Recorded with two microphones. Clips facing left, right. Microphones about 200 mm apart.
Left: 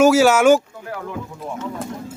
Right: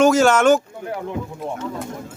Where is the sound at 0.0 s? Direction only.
5° left (ahead or behind).